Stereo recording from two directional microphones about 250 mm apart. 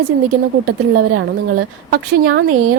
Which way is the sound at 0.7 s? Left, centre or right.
Right.